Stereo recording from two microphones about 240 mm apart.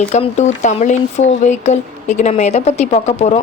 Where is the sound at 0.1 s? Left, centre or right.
Left.